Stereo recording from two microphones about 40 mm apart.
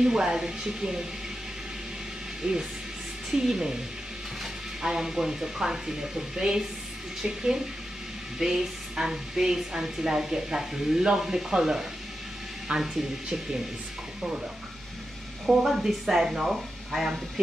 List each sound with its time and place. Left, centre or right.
0.0 s a woman's voice: centre
2.4 s a woman's voice: right
12.6 s speech: right
15.6 s a woman's voice: centre